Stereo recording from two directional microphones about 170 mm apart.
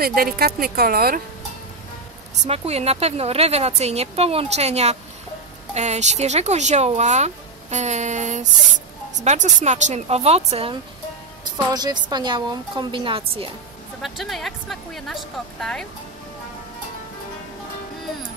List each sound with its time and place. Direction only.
0.0 s speech: 60° right (ahead or behind)
2.4 s a woman's voice: 40° right (ahead or behind)
14.0 s speech: centre (ahead or behind)